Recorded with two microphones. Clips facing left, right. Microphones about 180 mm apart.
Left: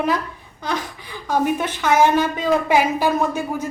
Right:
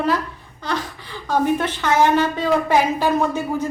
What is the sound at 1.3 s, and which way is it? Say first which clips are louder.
A woman's voice: right 1 dB; 10° left (ahead or behind).